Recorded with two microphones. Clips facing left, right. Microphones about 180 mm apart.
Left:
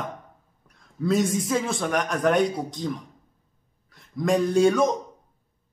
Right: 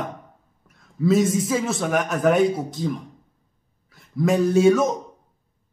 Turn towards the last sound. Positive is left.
turn(degrees=-5)  # may be behind; listen again after turning